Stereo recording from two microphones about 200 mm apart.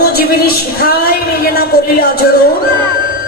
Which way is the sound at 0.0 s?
50° left (ahead or behind).